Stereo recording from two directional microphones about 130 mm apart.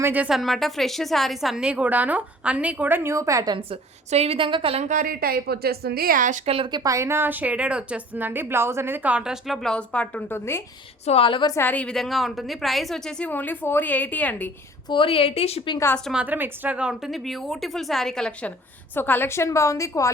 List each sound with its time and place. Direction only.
0.0 s a woman's voice: 10° right (ahead or behind)
0.3 s a woman's voice: centre (ahead or behind); by 3.6 s 30° right (ahead or behind)
3.7 s a woman's voice: 50° right (ahead or behind)
6.1 s a woman's voice: 85° right
6.7 s a woman's voice: 30° right (ahead or behind); by 10.6 s 20° left (ahead or behind)
11.0 s a woman's voice: 50° left (ahead or behind)
11.5 s a woman's voice: 15° left (ahead or behind)
14.8 s a woman's voice: 40° left (ahead or behind)
16.1 s a woman's voice: 15° right (ahead or behind); by 20.1 s 25° left (ahead or behind)